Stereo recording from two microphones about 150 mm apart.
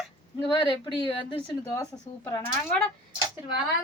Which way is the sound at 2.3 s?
20° left (ahead or behind).